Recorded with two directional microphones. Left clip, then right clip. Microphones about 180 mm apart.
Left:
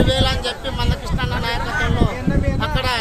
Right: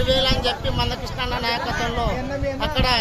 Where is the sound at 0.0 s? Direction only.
Centre (ahead or behind).